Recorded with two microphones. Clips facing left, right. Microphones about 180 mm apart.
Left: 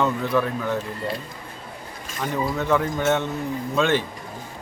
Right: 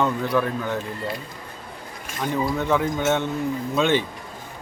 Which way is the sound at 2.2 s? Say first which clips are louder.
Right 1 dB; centre (ahead or behind).